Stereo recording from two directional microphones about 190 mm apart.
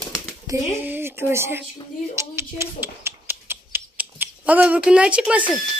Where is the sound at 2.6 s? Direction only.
15° right (ahead or behind).